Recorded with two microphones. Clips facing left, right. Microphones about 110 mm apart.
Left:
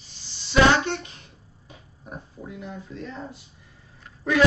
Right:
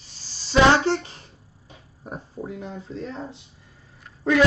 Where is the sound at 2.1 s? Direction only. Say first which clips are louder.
Right 5 dB; 35° right (ahead or behind).